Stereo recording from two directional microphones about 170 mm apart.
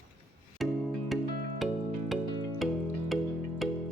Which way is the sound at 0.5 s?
Centre (ahead or behind).